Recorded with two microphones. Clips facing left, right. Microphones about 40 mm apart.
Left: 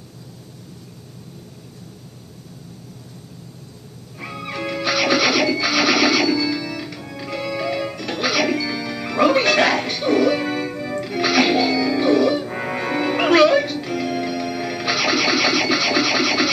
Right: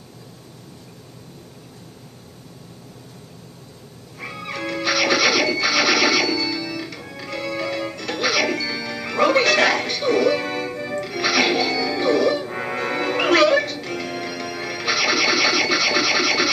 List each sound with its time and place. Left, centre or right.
4.2 s music: centre